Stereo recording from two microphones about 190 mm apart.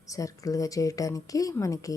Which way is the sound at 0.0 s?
15° left (ahead or behind).